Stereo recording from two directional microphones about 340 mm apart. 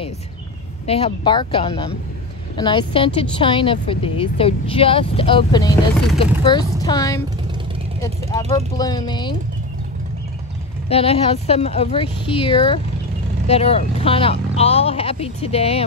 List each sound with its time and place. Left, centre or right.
0.8 s a woman's voice: centre
10.9 s a woman's voice: centre